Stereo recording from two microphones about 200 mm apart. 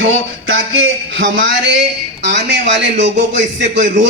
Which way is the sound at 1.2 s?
65° right (ahead or behind).